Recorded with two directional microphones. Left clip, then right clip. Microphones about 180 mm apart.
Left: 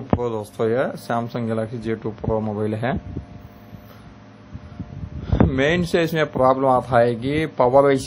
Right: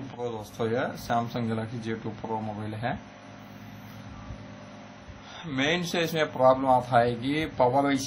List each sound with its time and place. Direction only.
0.2 s a man's voice: 60° left (ahead or behind)
5.3 s a man's voice: 60° left (ahead or behind)